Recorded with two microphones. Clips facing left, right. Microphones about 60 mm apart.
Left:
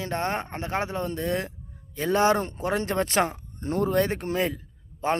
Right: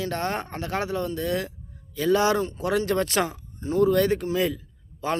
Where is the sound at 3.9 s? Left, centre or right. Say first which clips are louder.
Right 2 dB; left.